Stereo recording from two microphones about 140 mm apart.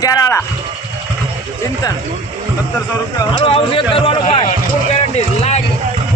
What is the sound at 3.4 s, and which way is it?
Speech, 35° left (ahead or behind).